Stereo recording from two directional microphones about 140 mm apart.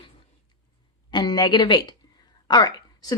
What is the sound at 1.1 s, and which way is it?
A woman's voice, 30° left (ahead or behind).